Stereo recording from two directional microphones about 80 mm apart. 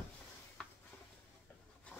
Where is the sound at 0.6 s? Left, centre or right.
Centre.